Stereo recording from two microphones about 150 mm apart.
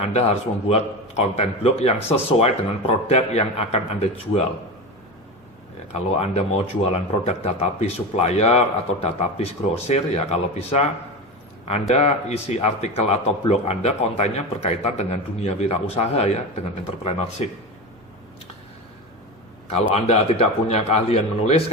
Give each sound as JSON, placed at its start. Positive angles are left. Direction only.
{"t": 0.0, "sound": "a man's voice", "side_deg": 45}
{"t": 5.9, "sound": "a man's voice", "side_deg": 45}
{"t": 11.9, "sound": "a man's voice", "side_deg": 45}
{"t": 19.9, "sound": "a man's voice", "side_deg": 45}